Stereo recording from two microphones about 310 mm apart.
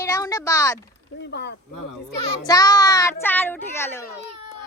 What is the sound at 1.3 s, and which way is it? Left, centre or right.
Speech, left.